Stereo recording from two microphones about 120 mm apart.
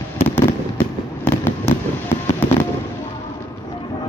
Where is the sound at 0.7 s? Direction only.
20° left (ahead or behind).